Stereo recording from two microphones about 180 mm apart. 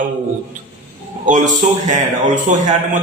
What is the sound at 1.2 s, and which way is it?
A man's voice, 45° right (ahead or behind).